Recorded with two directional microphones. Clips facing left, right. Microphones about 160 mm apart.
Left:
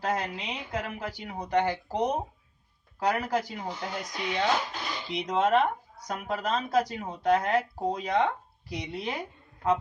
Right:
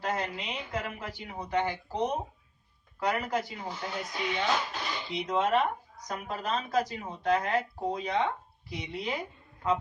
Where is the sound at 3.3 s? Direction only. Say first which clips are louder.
Left 2 dB; 40° left (ahead or behind).